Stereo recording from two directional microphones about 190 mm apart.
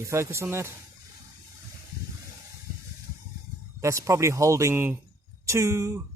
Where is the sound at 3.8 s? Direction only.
15° right (ahead or behind).